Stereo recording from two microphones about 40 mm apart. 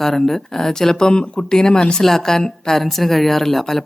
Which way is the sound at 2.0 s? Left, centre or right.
Centre.